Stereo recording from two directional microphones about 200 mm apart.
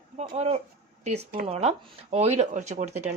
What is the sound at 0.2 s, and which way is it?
Speech, 30° right (ahead or behind).